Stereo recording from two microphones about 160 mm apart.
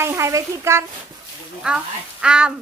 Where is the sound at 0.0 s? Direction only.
15° right (ahead or behind).